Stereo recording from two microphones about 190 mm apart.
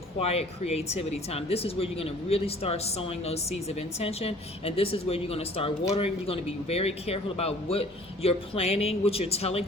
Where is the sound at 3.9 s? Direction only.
30° left (ahead or behind).